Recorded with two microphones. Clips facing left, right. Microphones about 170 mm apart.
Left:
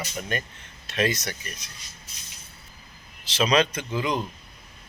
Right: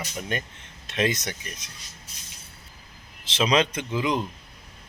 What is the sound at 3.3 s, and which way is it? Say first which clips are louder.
Speech: even; 20° right (ahead or behind).